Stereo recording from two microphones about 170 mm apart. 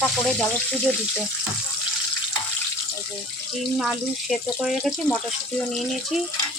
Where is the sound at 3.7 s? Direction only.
Centre (ahead or behind).